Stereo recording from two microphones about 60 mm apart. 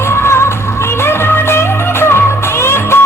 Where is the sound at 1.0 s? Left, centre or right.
Left.